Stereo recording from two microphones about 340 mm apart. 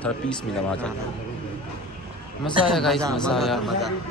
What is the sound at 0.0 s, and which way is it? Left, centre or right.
Speech, centre.